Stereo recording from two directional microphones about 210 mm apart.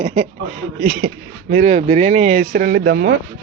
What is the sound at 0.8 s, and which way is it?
Speech, 45° right (ahead or behind).